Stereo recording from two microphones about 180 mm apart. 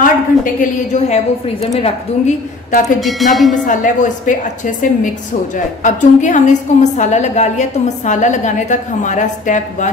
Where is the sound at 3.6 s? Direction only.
45° left (ahead or behind).